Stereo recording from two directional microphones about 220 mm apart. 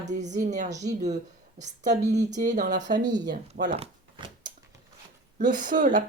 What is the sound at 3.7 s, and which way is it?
Shuffling cards, 25° right (ahead or behind).